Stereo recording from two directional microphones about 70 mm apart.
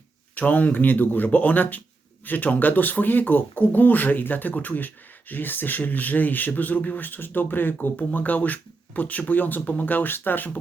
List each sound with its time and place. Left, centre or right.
0.3 s speech: left